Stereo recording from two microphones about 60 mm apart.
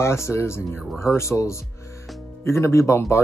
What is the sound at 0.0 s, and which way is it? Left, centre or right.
Speech, left.